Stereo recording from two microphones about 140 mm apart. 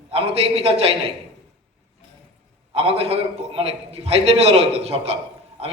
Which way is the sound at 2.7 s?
45° right (ahead or behind).